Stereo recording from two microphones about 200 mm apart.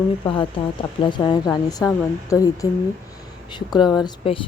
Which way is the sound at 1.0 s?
25° left (ahead or behind).